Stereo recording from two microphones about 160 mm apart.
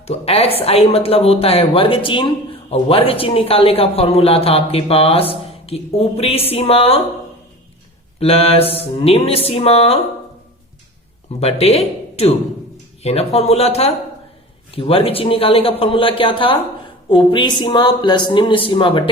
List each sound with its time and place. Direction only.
0.0 s a woman's voice: 40° left (ahead or behind)
8.2 s a woman's voice: 40° left (ahead or behind)
11.3 s a woman's voice: 40° left (ahead or behind)